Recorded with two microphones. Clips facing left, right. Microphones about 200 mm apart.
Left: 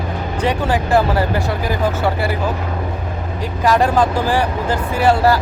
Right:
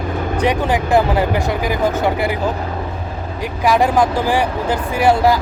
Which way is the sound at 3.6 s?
10° right (ahead or behind).